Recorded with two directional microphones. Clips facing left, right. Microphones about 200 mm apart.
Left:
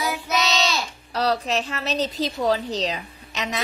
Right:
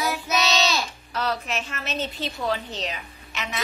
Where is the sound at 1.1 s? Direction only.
35° left (ahead or behind).